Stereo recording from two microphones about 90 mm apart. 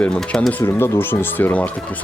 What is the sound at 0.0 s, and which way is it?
Speech, 10° left (ahead or behind).